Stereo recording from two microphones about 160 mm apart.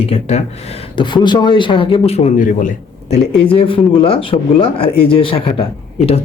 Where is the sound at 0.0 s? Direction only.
40° left (ahead or behind).